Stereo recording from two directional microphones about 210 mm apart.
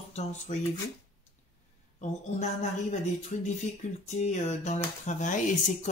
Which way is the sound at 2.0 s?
30° left (ahead or behind).